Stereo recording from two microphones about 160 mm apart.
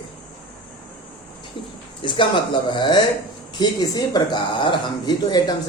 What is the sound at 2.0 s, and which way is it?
A man's voice, 30° left (ahead or behind).